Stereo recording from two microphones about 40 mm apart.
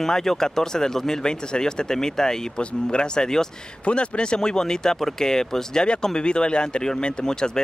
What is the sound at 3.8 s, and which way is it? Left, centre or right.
Speech, left.